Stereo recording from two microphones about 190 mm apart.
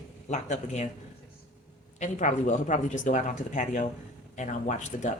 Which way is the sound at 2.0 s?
40° left (ahead or behind).